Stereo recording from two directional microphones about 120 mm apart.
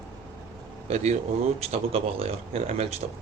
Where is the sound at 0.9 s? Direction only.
70° right (ahead or behind).